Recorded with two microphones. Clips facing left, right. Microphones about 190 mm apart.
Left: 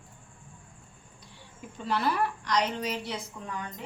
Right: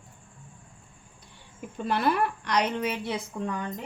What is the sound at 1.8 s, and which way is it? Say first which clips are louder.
A woman's voice: right 3 dB; 55° right (ahead or behind).